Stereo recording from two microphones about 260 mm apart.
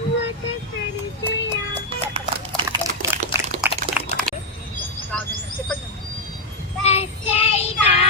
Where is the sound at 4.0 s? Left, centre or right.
Centre.